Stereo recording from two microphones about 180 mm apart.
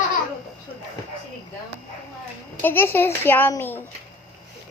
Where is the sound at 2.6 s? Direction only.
10° left (ahead or behind).